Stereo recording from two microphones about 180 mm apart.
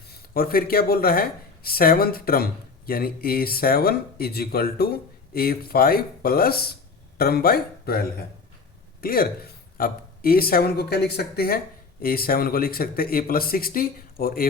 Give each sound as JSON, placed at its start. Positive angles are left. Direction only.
{"t": 0.1, "sound": "speech", "side_deg": 55}